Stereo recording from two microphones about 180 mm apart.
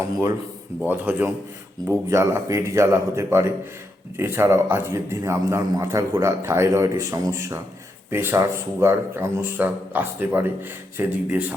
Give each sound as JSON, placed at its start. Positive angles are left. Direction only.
{"t": 0.9, "sound": "a man's voice", "side_deg": -10}